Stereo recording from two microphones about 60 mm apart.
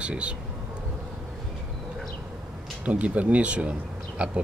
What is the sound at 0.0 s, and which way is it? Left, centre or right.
Speech, centre.